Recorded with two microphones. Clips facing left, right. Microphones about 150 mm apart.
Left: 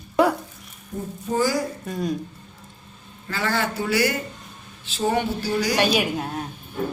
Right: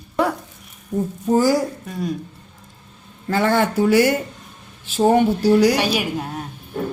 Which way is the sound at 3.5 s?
50° right (ahead or behind).